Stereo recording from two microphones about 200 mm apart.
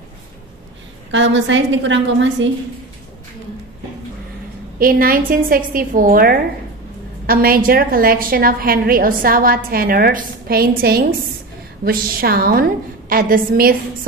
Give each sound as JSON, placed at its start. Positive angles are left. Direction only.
{"t": 1.1, "sound": "a woman's voice", "side_deg": -65}
{"t": 4.7, "sound": "a woman's voice", "side_deg": -45}